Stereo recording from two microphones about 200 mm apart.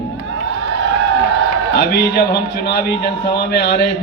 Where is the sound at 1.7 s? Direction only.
55° left (ahead or behind).